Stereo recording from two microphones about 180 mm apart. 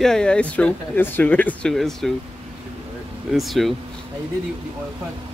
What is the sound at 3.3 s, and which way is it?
Speech, centre (ahead or behind).